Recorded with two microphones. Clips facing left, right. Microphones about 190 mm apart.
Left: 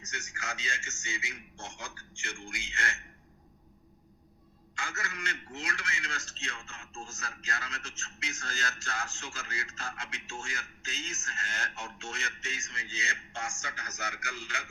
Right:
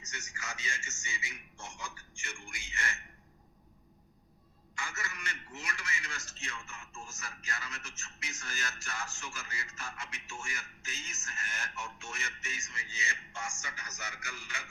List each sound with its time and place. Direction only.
0.3 s speech: 70° left (ahead or behind)
4.8 s speech: 75° left (ahead or behind)